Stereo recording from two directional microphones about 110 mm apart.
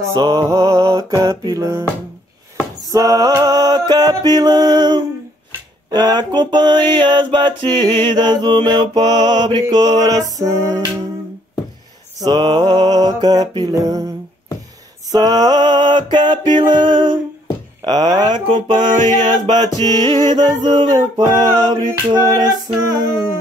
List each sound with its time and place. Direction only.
0.1 s music: 35° right (ahead or behind)
2.9 s music: 35° right (ahead or behind)
5.9 s mantra: 40° right (ahead or behind)
9.7 s music: 35° right (ahead or behind)
12.2 s music: 40° right (ahead or behind)
15.1 s music: 35° right (ahead or behind)
17.8 s mantra: 40° right (ahead or behind)
19.8 s music: 40° right (ahead or behind)
21.2 s music: 30° right (ahead or behind)